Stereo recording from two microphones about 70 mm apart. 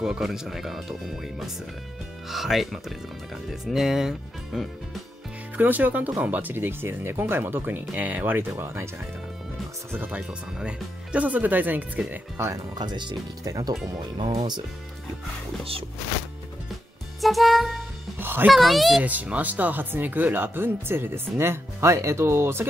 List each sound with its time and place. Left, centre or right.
0.0 s speech: centre
5.6 s speech: right
9.9 s speech: right
10.6 s speech: centre
12.5 s speech: right
13.5 s speech: right
17.2 s music: centre
18.2 s music: right
18.5 s speech: centre
19.0 s speech: right